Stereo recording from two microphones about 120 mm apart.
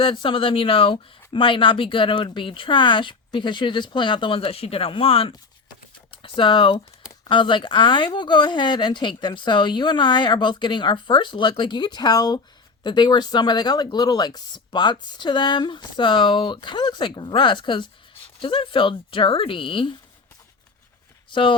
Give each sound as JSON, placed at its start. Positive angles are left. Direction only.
{"t": 0.0, "sound": "speech", "side_deg": 45}
{"t": 21.2, "sound": "speech", "side_deg": 45}